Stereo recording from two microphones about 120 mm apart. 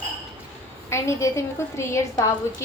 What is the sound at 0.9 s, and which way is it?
A woman's voice, 25° left (ahead or behind).